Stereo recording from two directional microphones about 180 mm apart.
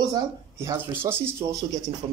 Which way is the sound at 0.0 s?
20° right (ahead or behind).